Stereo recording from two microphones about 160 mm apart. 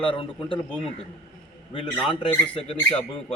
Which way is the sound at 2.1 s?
30° left (ahead or behind).